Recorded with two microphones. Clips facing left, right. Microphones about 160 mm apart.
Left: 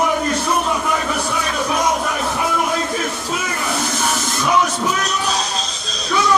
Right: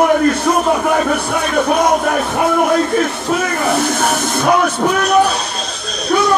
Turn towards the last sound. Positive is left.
turn(degrees=-60)  # may be behind; listen again after turning